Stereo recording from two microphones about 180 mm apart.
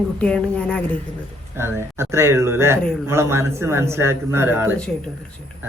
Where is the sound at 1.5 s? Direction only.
15° right (ahead or behind).